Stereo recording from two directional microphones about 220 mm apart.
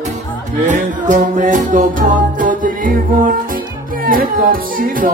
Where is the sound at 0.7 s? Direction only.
35° right (ahead or behind).